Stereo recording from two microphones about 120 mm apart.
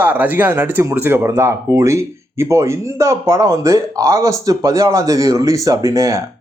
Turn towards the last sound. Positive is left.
turn(degrees=-25)  # may be behind; listen again after turning